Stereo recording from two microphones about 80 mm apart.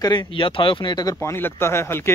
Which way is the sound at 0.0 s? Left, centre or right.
Left.